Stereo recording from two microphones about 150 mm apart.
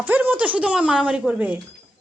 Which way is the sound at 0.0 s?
10° right (ahead or behind).